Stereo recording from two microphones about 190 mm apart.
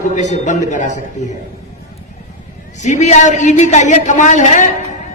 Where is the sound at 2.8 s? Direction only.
40° left (ahead or behind).